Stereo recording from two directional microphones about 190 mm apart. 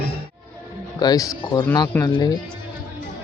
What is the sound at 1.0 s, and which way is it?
Speech, 20° left (ahead or behind).